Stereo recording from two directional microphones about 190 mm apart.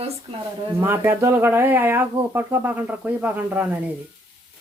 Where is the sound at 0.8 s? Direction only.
15° right (ahead or behind).